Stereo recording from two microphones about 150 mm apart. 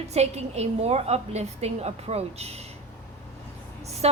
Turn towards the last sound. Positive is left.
turn(degrees=-45)  # may be behind; listen again after turning